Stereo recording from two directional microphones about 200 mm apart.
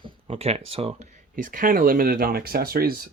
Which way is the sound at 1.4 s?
45° right (ahead or behind).